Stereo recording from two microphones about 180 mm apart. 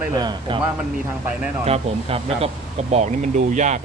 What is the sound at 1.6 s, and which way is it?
Speech, 35° right (ahead or behind).